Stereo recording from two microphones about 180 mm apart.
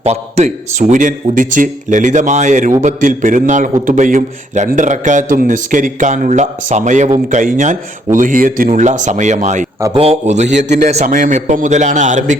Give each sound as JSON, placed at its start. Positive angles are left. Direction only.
{"t": 0.0, "sound": "a man's voice", "side_deg": -35}